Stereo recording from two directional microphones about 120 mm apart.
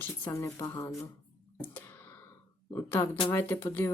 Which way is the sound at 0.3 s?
30° left (ahead or behind).